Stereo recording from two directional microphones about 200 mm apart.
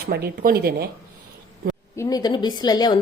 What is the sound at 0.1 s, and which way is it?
Speech, 50° right (ahead or behind).